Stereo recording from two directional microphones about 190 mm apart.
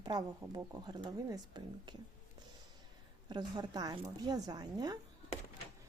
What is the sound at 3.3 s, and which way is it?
A woman's voice, 25° right (ahead or behind).